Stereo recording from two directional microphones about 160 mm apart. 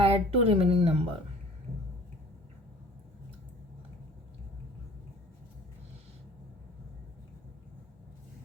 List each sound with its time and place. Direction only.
0.0 s speech: 35° right (ahead or behind)